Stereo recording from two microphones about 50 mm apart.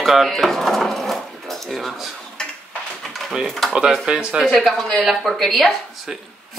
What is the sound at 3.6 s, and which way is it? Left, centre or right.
Speech, centre.